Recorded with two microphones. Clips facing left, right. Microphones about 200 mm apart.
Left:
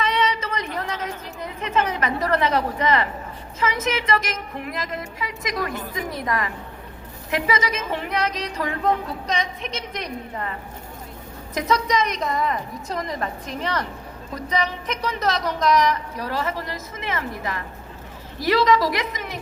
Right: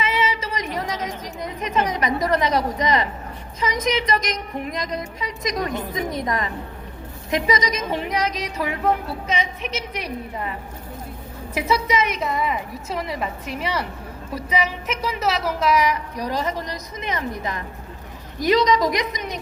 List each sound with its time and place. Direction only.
0.0 s a sound: 5° right (ahead or behind)
3.6 s a woman's voice: 15° right (ahead or behind)
11.5 s a woman's voice: 10° right (ahead or behind)